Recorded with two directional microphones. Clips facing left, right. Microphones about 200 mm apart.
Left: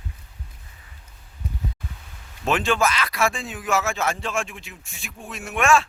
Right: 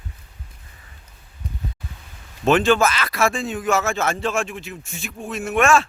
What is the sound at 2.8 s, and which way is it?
A man's voice, centre (ahead or behind).